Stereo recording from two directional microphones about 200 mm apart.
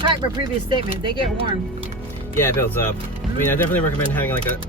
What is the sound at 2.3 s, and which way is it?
Speech, 10° left (ahead or behind).